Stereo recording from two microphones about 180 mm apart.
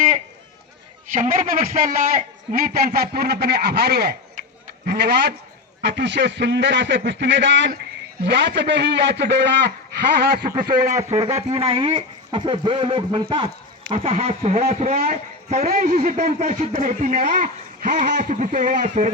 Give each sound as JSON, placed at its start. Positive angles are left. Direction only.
{"t": 1.1, "sound": "a man's voice", "side_deg": -45}
{"t": 8.2, "sound": "a man's voice", "side_deg": -75}
{"t": 10.8, "sound": "speech", "side_deg": -40}